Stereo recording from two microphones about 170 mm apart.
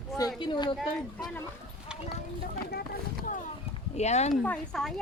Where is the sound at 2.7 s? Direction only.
60° left (ahead or behind).